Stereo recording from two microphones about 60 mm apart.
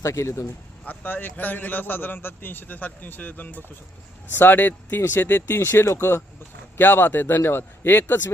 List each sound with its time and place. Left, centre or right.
0.0 s speech: left
0.9 s a man's voice: left
5.5 s speech: left
6.7 s a man's voice: left